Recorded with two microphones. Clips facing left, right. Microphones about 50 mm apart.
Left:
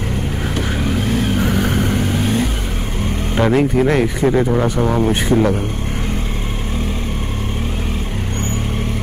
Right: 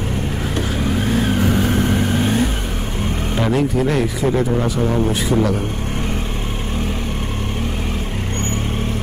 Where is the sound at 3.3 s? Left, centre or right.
Left.